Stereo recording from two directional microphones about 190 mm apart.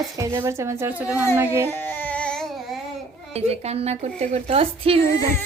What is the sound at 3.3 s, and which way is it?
Speech, 35° right (ahead or behind).